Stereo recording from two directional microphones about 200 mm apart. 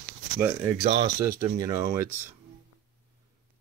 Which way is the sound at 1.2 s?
15° right (ahead or behind).